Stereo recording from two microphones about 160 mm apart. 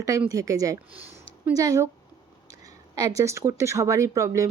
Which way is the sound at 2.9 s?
20° right (ahead or behind).